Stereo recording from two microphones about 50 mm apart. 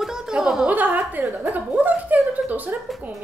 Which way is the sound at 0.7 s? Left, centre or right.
Right.